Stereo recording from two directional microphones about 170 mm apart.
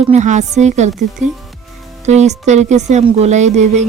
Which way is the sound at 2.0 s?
40° right (ahead or behind).